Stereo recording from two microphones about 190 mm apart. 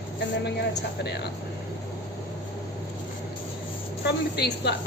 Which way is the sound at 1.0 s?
60° left (ahead or behind).